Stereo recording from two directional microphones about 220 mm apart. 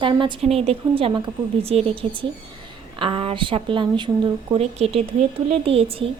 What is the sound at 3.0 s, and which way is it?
Speech, 25° right (ahead or behind).